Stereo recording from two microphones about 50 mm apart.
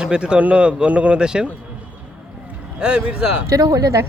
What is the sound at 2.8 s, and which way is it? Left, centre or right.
Speech, right.